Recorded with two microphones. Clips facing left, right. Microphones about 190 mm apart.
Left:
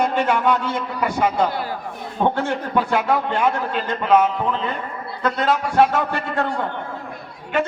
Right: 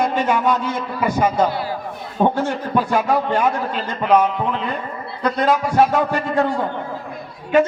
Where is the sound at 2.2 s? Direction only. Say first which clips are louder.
Right 3 dB; 10° right (ahead or behind).